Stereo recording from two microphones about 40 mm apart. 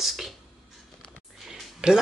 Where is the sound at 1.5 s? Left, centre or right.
Centre.